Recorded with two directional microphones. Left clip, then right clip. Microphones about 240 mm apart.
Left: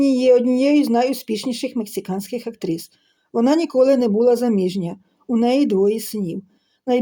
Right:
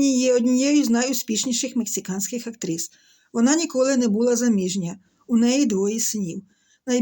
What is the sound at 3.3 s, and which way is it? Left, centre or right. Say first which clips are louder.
Speech: left 3 dB; right.